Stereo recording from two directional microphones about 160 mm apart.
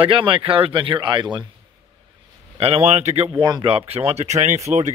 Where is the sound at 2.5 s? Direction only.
40° right (ahead or behind).